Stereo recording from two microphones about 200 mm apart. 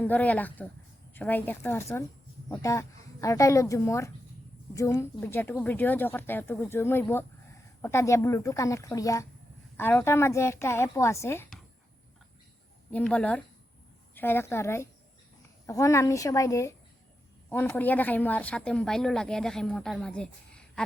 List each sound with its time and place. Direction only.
0.0 s a woman's voice: 10° left (ahead or behind)
12.9 s speech: 5° left (ahead or behind)